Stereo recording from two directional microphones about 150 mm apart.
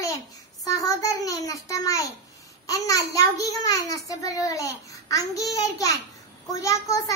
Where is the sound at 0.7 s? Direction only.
25° left (ahead or behind).